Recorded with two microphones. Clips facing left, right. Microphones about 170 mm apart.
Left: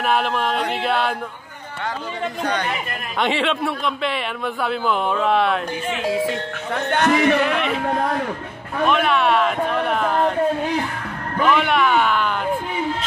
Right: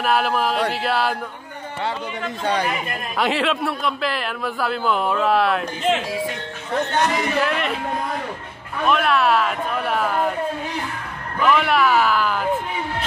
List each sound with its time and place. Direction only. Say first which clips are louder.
0.0 s speech: right 1 dB; centre (ahead or behind)
2.4 s speech: right 3 dB; 30° right (ahead or behind)
3.2 s speech: even; centre (ahead or behind)
6.9 s speech: left 8 dB; 60° left (ahead or behind)
7.3 s speech: left 2 dB; centre (ahead or behind)
8.8 s speech: even; centre (ahead or behind)
11.5 s speech: right 1 dB; centre (ahead or behind)